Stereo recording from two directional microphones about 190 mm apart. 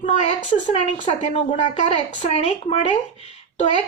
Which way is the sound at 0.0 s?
35° left (ahead or behind).